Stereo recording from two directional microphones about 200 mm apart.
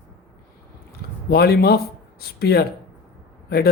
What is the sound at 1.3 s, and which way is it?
Speech, 50° left (ahead or behind).